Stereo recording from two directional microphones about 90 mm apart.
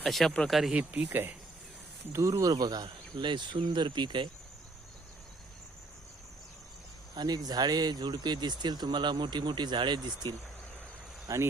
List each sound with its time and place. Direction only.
0.0 s speech: centre (ahead or behind)
0.7 s speech: 15° right (ahead or behind)
2.1 s speech: 35° right (ahead or behind); by 4.3 s 60° right (ahead or behind)
7.2 s speech: 50° right (ahead or behind)
11.3 s speech: 45° right (ahead or behind)